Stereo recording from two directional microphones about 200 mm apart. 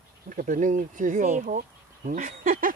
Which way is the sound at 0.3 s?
40° right (ahead or behind).